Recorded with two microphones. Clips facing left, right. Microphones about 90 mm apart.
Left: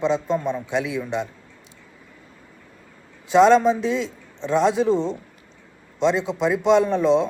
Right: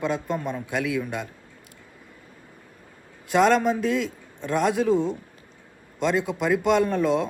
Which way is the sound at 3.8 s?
20° left (ahead or behind).